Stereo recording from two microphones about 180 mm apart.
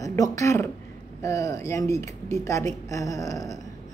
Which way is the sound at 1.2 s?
15° left (ahead or behind).